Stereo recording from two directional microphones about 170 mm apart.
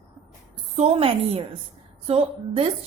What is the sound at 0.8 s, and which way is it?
A woman's voice, 35° right (ahead or behind).